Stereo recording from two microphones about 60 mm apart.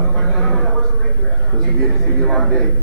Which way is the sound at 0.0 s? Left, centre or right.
Centre.